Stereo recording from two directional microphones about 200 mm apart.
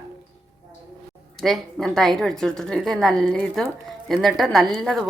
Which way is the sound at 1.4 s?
Centre (ahead or behind).